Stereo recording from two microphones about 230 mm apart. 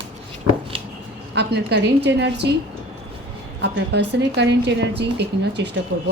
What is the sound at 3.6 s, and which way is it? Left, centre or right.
A woman's voice, right.